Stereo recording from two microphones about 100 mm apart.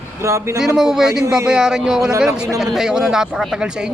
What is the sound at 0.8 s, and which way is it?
Speech, 5° right (ahead or behind).